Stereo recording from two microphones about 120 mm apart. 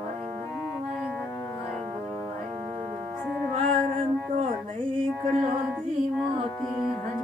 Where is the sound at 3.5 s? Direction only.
65° right (ahead or behind).